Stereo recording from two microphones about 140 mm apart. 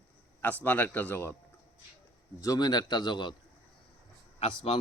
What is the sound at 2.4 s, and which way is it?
Speech, 25° left (ahead or behind).